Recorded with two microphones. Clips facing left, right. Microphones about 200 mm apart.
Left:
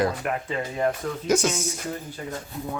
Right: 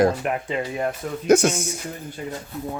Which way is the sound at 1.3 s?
60° right (ahead or behind).